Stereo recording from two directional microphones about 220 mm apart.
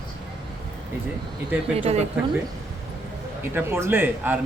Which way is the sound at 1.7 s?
30° right (ahead or behind).